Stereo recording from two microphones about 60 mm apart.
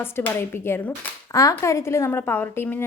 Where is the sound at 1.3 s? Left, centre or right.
Left.